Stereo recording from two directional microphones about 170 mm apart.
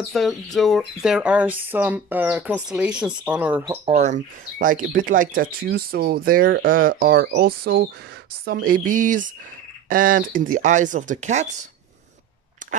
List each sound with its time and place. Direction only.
0.1 s speech: centre (ahead or behind)
3.8 s speech: 40° right (ahead or behind)